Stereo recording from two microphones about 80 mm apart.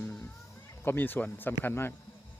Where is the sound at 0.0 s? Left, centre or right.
Centre.